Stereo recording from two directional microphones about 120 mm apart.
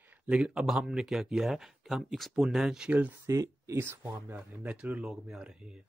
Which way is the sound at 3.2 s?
25° right (ahead or behind).